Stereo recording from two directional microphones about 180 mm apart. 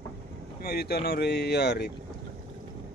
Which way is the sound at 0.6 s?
60° left (ahead or behind).